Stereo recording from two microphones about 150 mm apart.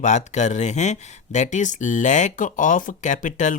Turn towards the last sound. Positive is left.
turn(degrees=55)  # may be behind; listen again after turning